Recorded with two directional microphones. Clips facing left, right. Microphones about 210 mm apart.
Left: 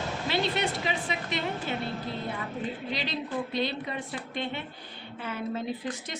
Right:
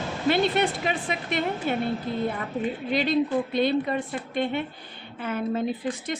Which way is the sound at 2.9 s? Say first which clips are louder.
Right 12 dB; 50° right (ahead or behind).